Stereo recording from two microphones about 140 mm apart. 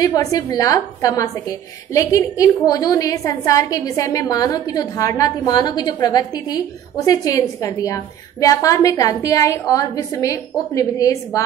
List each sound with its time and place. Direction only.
0.0 s a woman's voice: 25° left (ahead or behind)